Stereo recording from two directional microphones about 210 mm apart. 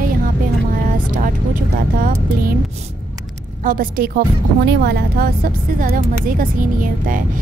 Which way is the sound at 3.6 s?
40° right (ahead or behind).